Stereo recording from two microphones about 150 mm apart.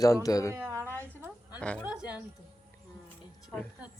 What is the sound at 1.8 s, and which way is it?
Speech, 10° right (ahead or behind).